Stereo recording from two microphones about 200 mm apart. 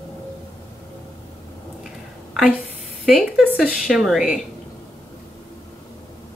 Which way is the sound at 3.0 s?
5° right (ahead or behind).